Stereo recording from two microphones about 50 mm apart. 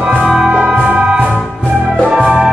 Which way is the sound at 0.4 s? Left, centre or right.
Centre.